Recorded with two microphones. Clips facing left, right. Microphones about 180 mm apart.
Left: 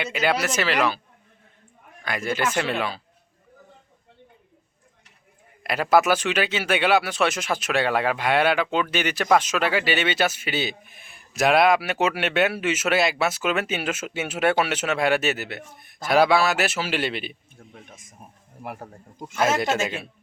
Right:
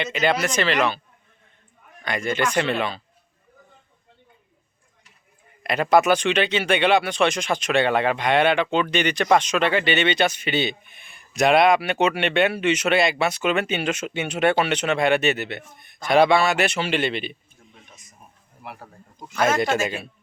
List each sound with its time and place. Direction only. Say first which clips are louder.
0.0 s speech: right 2 dB; 5° left (ahead or behind)
2.0 s speech: right 2 dB; 5° left (ahead or behind)
5.6 s speech: right 2 dB; 5° left (ahead or behind)
17.6 s a sound: left 5 dB; 55° left (ahead or behind)
18.6 s speech: left 4 dB; 45° left (ahead or behind)
19.4 s speech: right 1 dB; centre (ahead or behind)